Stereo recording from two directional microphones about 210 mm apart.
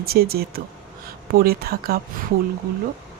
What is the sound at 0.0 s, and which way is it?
A woman's voice, 45° right (ahead or behind).